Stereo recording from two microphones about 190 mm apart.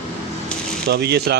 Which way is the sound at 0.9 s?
60° right (ahead or behind).